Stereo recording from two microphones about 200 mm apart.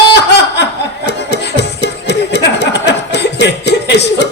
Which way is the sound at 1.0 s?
60° left (ahead or behind).